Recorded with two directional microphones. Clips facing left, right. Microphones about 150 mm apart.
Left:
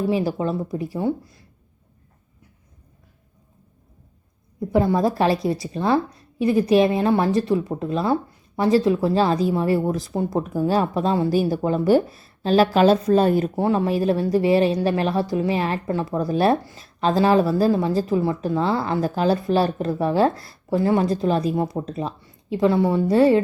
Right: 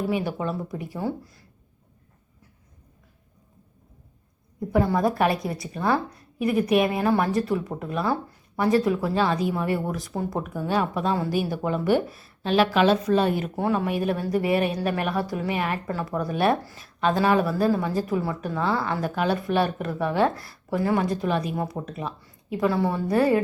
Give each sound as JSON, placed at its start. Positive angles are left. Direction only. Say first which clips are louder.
{"t": 0.1, "sound": "a woman's voice", "louder": "left 4 dB", "side_deg": 30}
{"t": 4.7, "sound": "a woman's voice", "louder": "left 3 dB", "side_deg": 25}